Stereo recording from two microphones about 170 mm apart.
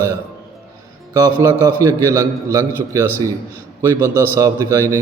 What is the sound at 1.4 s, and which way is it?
A man's voice, 15° right (ahead or behind).